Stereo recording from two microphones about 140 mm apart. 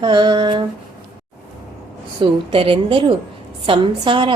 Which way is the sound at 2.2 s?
40° right (ahead or behind).